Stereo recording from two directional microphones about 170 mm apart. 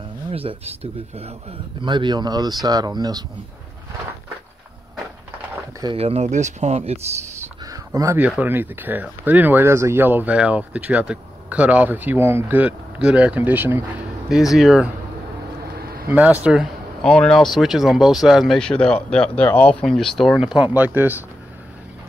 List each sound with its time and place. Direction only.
0.3 s speech: 35° right (ahead or behind)
5.9 s speech: 35° right (ahead or behind)
7.6 s a sound: 20° right (ahead or behind)
8.3 s speech: 10° right (ahead or behind)
15.8 s a sound: 65° right (ahead or behind)
16.1 s speech: 10° right (ahead or behind)